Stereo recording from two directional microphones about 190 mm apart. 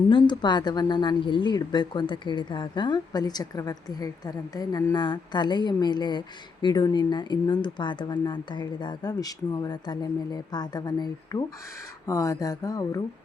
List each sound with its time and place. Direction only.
0.1 s speech: 25° left (ahead or behind)